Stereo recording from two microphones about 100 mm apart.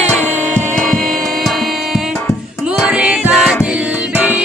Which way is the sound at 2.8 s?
10° right (ahead or behind).